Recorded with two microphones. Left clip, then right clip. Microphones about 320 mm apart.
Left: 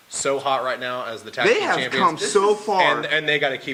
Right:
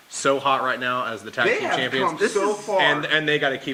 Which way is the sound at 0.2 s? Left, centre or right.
Right.